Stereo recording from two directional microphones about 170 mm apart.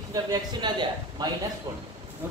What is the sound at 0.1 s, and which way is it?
Speech, 25° right (ahead or behind).